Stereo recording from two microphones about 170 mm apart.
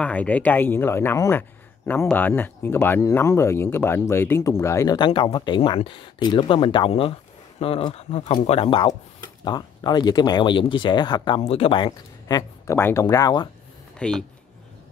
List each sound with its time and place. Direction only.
0.0 s speech: 10° left (ahead or behind)
13.9 s speech: 5° left (ahead or behind)